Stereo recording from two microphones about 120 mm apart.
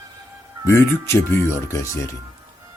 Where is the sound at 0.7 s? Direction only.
25° left (ahead or behind).